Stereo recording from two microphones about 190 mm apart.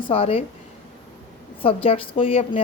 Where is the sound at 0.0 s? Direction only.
30° left (ahead or behind).